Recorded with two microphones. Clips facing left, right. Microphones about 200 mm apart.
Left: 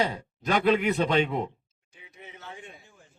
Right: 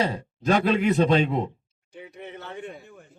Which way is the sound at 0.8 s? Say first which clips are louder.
Right 4 dB; 35° right (ahead or behind).